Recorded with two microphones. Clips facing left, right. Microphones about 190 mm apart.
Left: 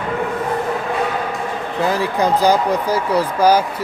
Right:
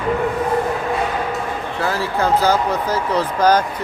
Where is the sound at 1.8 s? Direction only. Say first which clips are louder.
Left 3 dB; 15° left (ahead or behind).